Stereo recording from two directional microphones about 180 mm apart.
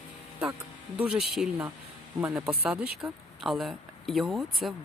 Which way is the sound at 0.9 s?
5° right (ahead or behind).